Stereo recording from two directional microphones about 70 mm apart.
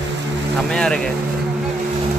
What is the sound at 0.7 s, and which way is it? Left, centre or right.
Speech, centre.